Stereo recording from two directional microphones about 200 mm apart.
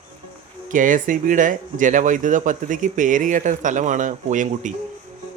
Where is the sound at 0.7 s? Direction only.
40° right (ahead or behind).